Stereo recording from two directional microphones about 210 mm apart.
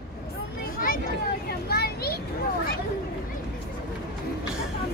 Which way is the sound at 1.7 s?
50° left (ahead or behind).